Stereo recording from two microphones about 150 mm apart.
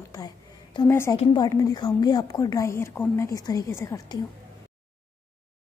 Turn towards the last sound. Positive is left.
turn(degrees=25)  # may be behind; listen again after turning